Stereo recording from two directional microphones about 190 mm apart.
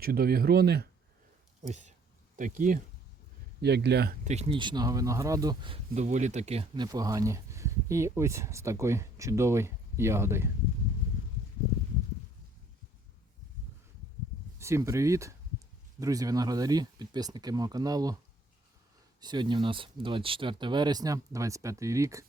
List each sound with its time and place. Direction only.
0.0 s speech: 55° right (ahead or behind)
2.3 s speech: 40° right (ahead or behind)
3.6 s speech: 60° right (ahead or behind)
4.2 s speech: 35° right (ahead or behind)
6.8 s speech: 20° right (ahead or behind)
14.6 s speech: 15° right (ahead or behind)
19.2 s speech: 25° right (ahead or behind)